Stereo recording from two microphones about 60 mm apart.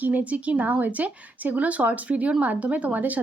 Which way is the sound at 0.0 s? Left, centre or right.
Right.